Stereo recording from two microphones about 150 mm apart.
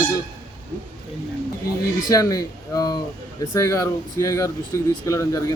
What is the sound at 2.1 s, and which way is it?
Speech, 25° left (ahead or behind).